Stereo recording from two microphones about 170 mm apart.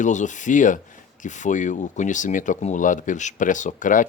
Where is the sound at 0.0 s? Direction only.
45° left (ahead or behind).